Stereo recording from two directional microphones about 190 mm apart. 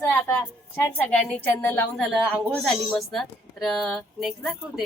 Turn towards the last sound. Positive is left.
turn(degrees=0)  # may be behind; listen again after turning